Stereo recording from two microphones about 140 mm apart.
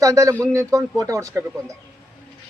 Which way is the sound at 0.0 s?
20° right (ahead or behind).